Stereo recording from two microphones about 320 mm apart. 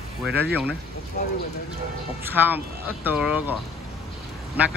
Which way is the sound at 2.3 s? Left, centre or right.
Centre.